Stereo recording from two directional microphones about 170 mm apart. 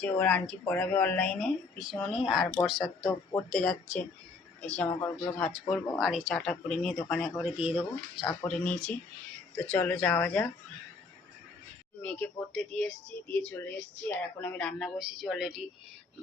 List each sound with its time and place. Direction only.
0.0 s a woman's voice: 10° left (ahead or behind)
5.4 s speech: 5° left (ahead or behind)
6.0 s a woman's voice: centre (ahead or behind)
8.4 s speech: 5° left (ahead or behind)
12.0 s a woman's voice: 5° left (ahead or behind)